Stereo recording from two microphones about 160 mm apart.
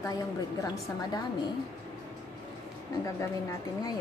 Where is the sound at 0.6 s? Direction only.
25° left (ahead or behind).